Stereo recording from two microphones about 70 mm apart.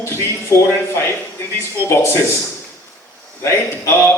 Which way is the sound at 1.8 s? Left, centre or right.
Left.